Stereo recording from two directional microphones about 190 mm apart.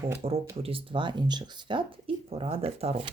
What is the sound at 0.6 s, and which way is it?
Speech, 30° right (ahead or behind).